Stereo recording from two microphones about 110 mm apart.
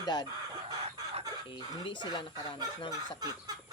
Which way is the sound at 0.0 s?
40° left (ahead or behind).